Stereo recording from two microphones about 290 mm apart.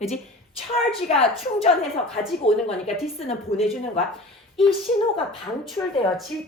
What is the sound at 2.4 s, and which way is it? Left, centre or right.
A woman's voice, left.